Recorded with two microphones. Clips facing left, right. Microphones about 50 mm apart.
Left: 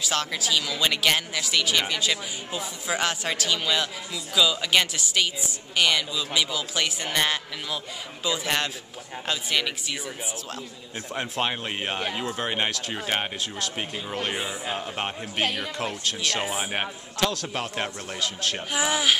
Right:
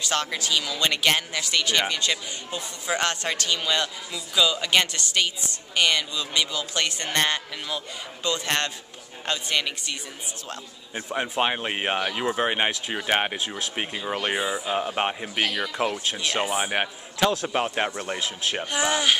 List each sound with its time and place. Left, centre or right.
0.0 s speech: centre
11.0 s a man's voice: centre
16.4 s speech: centre
16.7 s a man's voice: centre
18.7 s speech: centre